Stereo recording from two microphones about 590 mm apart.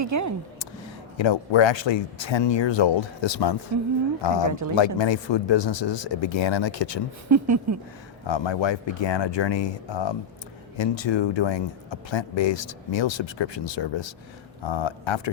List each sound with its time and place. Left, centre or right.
0.0 s speech: right
1.2 s speech: left
4.4 s speech: right
4.9 s speech: left
7.3 s speech: right
8.3 s speech: left